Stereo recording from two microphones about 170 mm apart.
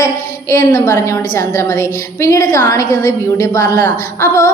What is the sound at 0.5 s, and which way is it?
A woman's voice, 15° left (ahead or behind).